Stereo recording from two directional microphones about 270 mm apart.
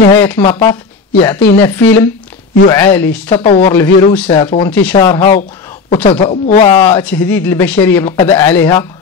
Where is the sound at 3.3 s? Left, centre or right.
Left.